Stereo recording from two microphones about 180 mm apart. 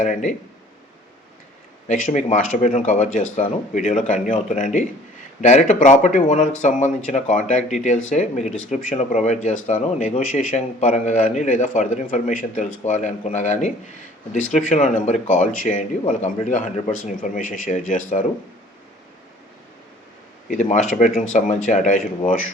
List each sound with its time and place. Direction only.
0.0 s speech: 45° left (ahead or behind)
1.9 s speech: 45° left (ahead or behind)
20.5 s speech: 40° left (ahead or behind)